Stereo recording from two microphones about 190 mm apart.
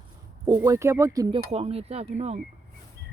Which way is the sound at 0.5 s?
15° right (ahead or behind).